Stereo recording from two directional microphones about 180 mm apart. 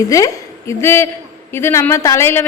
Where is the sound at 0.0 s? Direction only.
20° left (ahead or behind).